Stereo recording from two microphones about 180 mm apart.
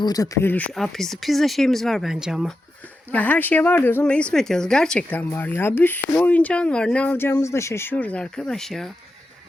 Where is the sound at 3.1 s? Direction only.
10° left (ahead or behind).